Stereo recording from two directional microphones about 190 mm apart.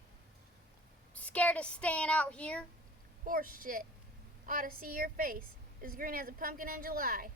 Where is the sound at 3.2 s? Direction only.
50° right (ahead or behind).